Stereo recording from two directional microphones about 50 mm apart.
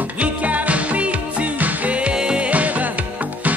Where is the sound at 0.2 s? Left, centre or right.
Right.